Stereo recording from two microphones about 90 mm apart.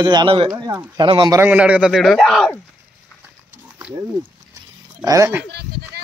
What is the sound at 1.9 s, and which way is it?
Speech, centre (ahead or behind).